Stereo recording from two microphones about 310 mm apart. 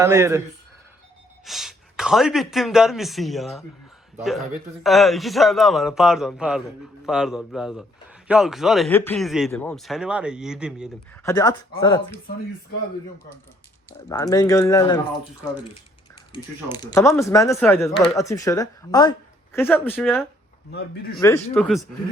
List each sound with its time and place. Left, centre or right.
0.0 s a man's voice: centre
1.5 s speech: centre
11.2 s speech: centre
14.1 s speech: centre
16.7 s speech: centre
20.7 s speech: left
21.2 s speech: centre